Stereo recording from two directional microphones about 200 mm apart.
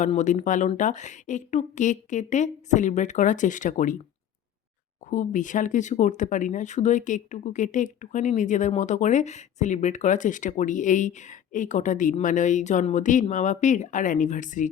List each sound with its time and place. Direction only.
0.0 s speech: 35° left (ahead or behind)
5.0 s speech: 40° left (ahead or behind)